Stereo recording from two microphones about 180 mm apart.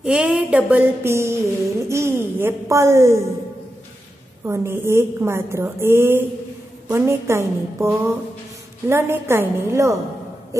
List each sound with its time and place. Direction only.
0.0 s a woman's voice: 5° right (ahead or behind)
4.5 s a woman's voice: 15° right (ahead or behind)